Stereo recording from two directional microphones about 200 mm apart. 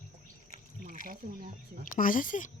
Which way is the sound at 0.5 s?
40° right (ahead or behind).